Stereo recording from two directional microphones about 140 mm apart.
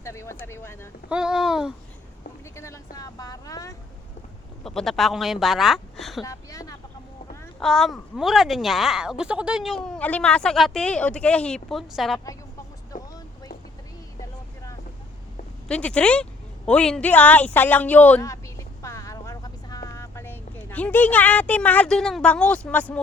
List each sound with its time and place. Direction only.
0.0 s speech: 20° left (ahead or behind)
1.1 s speech: 5° right (ahead or behind)
2.6 s speech: 20° left (ahead or behind)
4.6 s speech: centre (ahead or behind)
6.2 s speech: 25° left (ahead or behind)
7.6 s speech: 5° left (ahead or behind)
12.9 s vehicle: 70° left (ahead or behind)
15.6 s speech: 5° left (ahead or behind)
18.2 s a sound: 20° left (ahead or behind)